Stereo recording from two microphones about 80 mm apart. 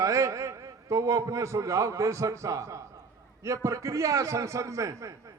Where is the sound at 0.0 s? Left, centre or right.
Right.